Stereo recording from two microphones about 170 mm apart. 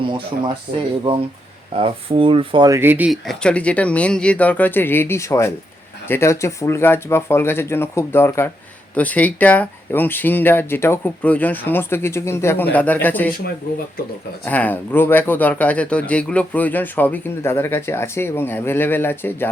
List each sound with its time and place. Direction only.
0.7 s speech: 70° right (ahead or behind)
1.8 s speech: 30° right (ahead or behind)
2.6 s speech: 15° right (ahead or behind)
3.2 s speech: 5° left (ahead or behind)
14.4 s speech: 10° left (ahead or behind)